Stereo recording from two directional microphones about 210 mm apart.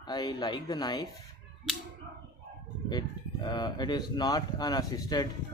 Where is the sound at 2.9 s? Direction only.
20° left (ahead or behind).